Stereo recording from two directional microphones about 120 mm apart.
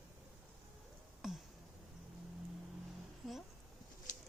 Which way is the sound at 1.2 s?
5° right (ahead or behind).